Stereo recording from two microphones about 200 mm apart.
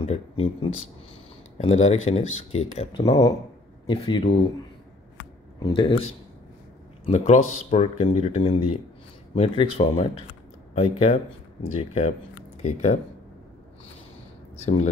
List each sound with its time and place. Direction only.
0.0 s a sound: 30° left (ahead or behind)
1.6 s speech: 30° left (ahead or behind)
3.0 s speech: 20° left (ahead or behind)
5.6 s speech: 25° left (ahead or behind)
7.1 s speech: 35° left (ahead or behind)
14.6 s speech: 35° left (ahead or behind)